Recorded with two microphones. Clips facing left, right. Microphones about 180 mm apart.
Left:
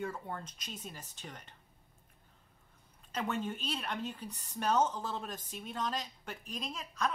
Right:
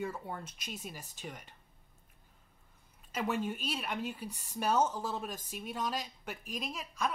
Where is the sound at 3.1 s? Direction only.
10° right (ahead or behind).